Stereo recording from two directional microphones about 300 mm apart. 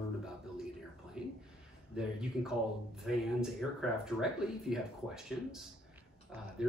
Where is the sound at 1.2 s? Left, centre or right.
Centre.